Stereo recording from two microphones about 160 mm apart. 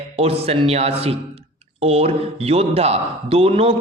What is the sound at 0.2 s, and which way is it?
A man's voice, 40° right (ahead or behind).